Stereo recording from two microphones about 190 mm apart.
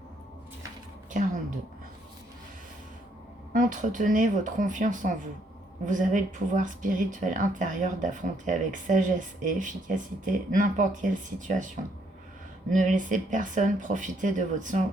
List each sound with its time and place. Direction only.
1.1 s a sound: 45° right (ahead or behind)
3.5 s speech: 40° right (ahead or behind)
12.7 s speech: 40° right (ahead or behind)